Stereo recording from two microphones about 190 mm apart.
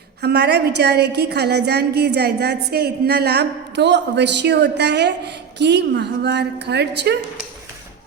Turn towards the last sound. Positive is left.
turn(degrees=-60)  # may be behind; listen again after turning